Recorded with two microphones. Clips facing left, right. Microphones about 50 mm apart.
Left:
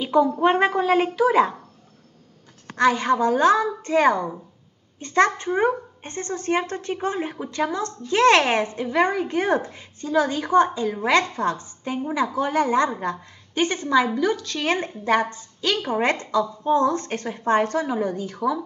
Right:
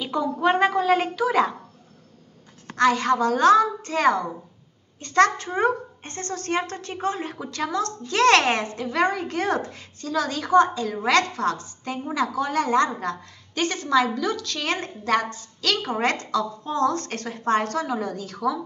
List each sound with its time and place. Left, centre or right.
0.0 s a woman's voice: left
2.8 s a woman's voice: centre